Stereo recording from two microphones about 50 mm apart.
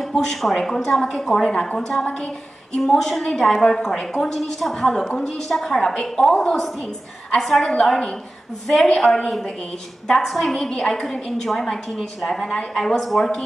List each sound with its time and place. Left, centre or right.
0.0 s a woman's voice: centre
2.8 s a woman's voice: centre
7.3 s a woman's voice: centre